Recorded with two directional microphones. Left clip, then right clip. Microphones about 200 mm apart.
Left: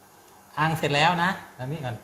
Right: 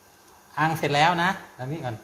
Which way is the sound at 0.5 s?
35° right (ahead or behind).